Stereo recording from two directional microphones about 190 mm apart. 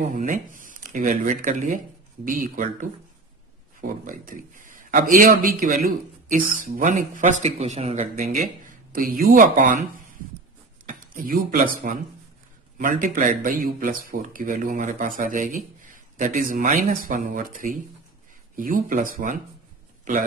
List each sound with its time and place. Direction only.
0.1 s a man's voice: 45° right (ahead or behind)